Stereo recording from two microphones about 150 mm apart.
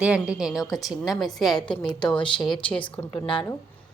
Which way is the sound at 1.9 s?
30° left (ahead or behind).